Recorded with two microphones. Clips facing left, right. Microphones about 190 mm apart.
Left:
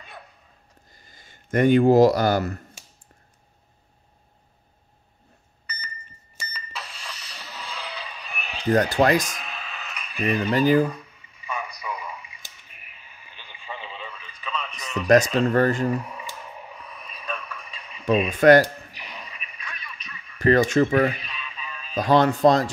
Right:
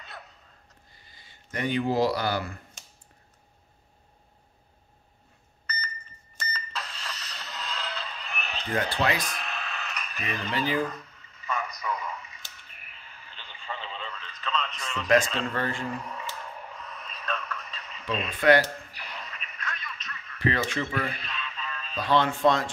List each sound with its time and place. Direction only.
0.9 s speech: 45° left (ahead or behind)
5.7 s beep: 10° left (ahead or behind)
6.3 s a sound: 10° left (ahead or behind)
8.6 s speech: 40° left (ahead or behind)
9.4 s a sound: 10° left (ahead or behind)
10.5 s speech: 45° left (ahead or behind)
10.8 s radio: 10° left (ahead or behind)
15.4 s speech: 40° left (ahead or behind)
15.9 s radio: 10° left (ahead or behind)
18.3 s speech: 45° left (ahead or behind)
18.9 s a sound: 10° left (ahead or behind)
20.3 s speech: 45° left (ahead or behind)
21.1 s radio: 10° left (ahead or behind)
21.9 s speech: 40° left (ahead or behind)